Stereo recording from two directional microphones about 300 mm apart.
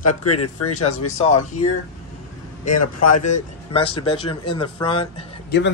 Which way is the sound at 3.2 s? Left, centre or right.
Left.